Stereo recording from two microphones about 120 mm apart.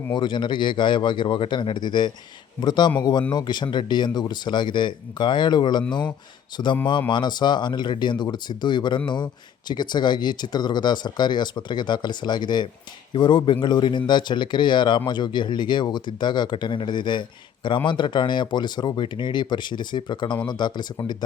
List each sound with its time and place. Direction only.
0.1 s speech: 40° left (ahead or behind)
7.1 s speech: 40° left (ahead or behind)